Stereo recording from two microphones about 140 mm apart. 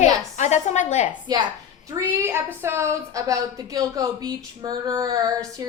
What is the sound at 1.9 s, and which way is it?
A woman's voice, 15° right (ahead or behind).